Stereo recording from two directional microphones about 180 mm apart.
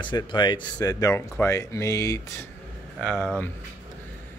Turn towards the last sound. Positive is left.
turn(degrees=5)  # may be behind; listen again after turning